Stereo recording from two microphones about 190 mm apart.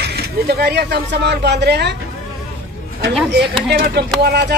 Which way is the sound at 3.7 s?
50° right (ahead or behind).